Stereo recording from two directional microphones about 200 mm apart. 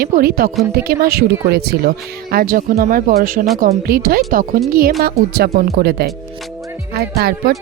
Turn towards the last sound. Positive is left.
turn(degrees=-50)  # may be behind; listen again after turning